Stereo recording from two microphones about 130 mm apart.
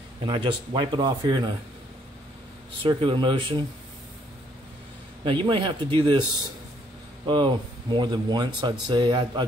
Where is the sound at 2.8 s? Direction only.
40° right (ahead or behind).